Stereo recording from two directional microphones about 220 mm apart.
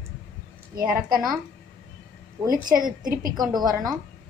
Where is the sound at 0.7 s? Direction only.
40° right (ahead or behind).